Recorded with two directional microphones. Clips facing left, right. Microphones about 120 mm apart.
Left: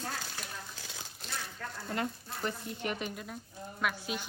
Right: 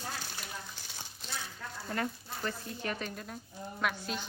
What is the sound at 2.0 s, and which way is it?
Speech, 20° left (ahead or behind).